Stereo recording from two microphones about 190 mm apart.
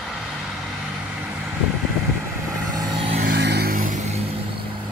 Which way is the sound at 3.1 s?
60° right (ahead or behind).